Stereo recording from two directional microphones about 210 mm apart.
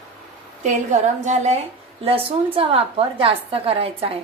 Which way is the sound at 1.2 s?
30° right (ahead or behind).